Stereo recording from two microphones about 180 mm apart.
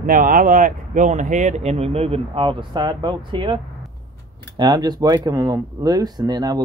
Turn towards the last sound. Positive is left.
turn(degrees=-20)  # may be behind; listen again after turning